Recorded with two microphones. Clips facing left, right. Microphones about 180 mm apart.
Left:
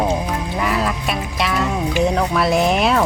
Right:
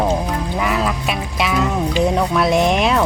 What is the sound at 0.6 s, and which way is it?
Quack, centre (ahead or behind).